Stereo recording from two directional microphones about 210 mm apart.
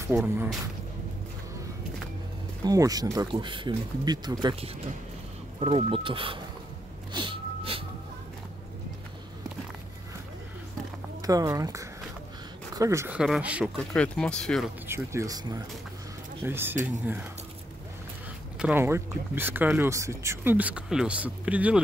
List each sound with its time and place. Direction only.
0.0 s speech: 10° right (ahead or behind)
2.6 s speech: 15° right (ahead or behind)
7.1 s music: 25° right (ahead or behind)
11.2 s speech: 15° right (ahead or behind)
13.9 s speech: 5° left (ahead or behind)
14.9 s speech: 15° right (ahead or behind)
16.4 s speech: 10° right (ahead or behind)
18.6 s speech: 10° right (ahead or behind)